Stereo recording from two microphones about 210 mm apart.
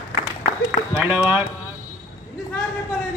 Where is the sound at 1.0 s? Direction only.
5° right (ahead or behind).